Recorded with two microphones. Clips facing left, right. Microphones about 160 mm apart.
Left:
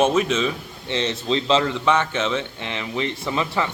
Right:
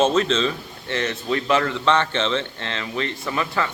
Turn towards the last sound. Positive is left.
turn(degrees=20)  # may be behind; listen again after turning